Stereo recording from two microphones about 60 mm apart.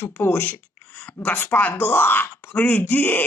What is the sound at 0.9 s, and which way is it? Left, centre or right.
Speech, left.